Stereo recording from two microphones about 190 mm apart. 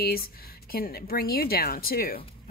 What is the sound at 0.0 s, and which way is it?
A woman's voice, 50° left (ahead or behind).